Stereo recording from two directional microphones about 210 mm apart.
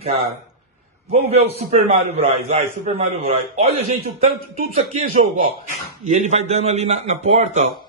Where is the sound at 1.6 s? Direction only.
30° right (ahead or behind).